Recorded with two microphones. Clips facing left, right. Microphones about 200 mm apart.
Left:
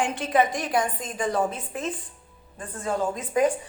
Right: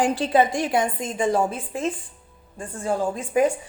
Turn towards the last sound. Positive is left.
turn(degrees=-30)  # may be behind; listen again after turning